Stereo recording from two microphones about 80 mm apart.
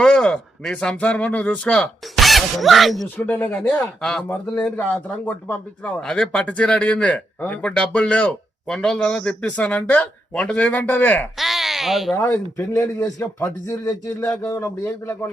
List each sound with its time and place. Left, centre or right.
0.0 s speech: centre
2.2 s speech: centre
3.2 s speech: left
4.3 s speech: left
6.0 s speech: centre
11.3 s a sound: centre
12.1 s speech: left